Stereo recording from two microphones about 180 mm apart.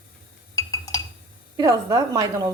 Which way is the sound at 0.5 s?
20° left (ahead or behind).